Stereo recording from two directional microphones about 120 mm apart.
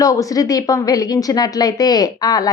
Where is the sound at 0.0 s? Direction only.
30° left (ahead or behind).